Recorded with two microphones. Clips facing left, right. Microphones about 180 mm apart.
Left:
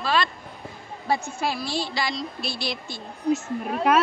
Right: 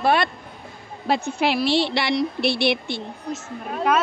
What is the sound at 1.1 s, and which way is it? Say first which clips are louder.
A woman's voice: right 4 dB; 70° right (ahead or behind).